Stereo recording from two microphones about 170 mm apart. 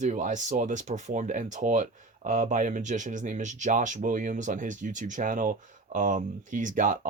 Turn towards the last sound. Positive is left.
turn(degrees=-50)  # may be behind; listen again after turning